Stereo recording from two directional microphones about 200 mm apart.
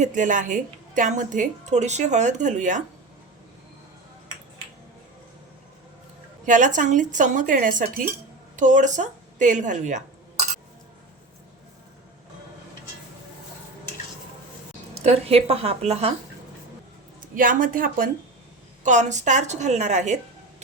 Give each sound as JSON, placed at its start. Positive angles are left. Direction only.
{"t": 0.0, "sound": "a woman's voice", "side_deg": -40}
{"t": 6.4, "sound": "a woman's voice", "side_deg": -40}
{"t": 14.9, "sound": "a woman's voice", "side_deg": -30}
{"t": 17.3, "sound": "a woman's voice", "side_deg": -45}